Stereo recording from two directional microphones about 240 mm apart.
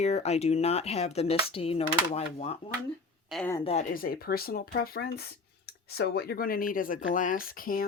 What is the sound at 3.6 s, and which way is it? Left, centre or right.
Speech, left.